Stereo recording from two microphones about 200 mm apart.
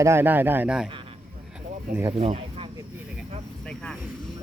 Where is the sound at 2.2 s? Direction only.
30° right (ahead or behind).